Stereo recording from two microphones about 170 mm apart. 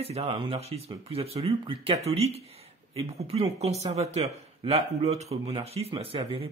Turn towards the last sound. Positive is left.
turn(degrees=-35)  # may be behind; listen again after turning